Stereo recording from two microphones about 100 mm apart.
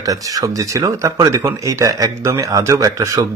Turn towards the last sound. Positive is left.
turn(degrees=-35)  # may be behind; listen again after turning